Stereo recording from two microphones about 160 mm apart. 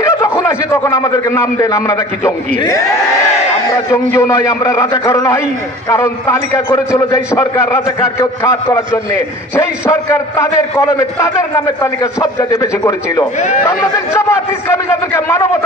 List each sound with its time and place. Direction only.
0.0 s a man's voice: 15° left (ahead or behind)
4.1 s a man's voice: 15° left (ahead or behind)